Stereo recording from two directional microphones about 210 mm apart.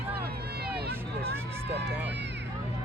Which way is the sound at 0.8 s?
50° right (ahead or behind).